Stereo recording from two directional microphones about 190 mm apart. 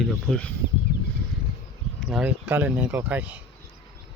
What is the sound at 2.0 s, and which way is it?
Speech, centre (ahead or behind).